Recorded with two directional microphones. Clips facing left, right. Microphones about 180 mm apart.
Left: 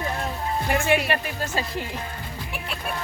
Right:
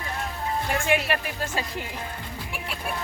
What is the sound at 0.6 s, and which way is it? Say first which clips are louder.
Speech: left 3 dB; 5° left (ahead or behind).